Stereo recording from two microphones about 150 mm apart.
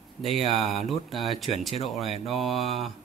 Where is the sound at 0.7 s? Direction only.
Centre (ahead or behind).